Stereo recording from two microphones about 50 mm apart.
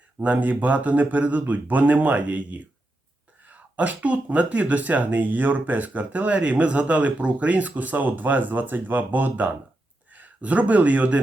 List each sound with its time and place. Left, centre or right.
0.2 s speech: right